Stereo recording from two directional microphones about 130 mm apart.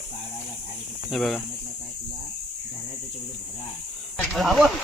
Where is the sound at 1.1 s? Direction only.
Centre (ahead or behind).